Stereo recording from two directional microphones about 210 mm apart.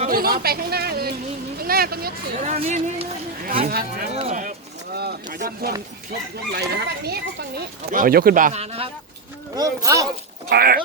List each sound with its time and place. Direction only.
0.0 s a woman's voice: 45° right (ahead or behind)
2.4 s speech: 35° right (ahead or behind)
4.1 s speech: 35° right (ahead or behind)
4.9 s a child's voice: 45° right (ahead or behind); by 8.9 s 30° right (ahead or behind)
9.6 s speech: 15° right (ahead or behind)
10.5 s a child's voice: 45° right (ahead or behind)